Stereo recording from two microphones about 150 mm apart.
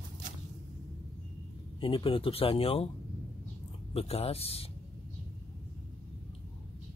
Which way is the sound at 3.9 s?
40° left (ahead or behind).